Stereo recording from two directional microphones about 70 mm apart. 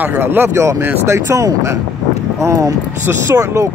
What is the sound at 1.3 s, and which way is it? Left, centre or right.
Speech, right.